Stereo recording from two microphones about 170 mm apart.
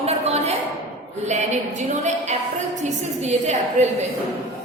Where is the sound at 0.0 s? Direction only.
40° right (ahead or behind).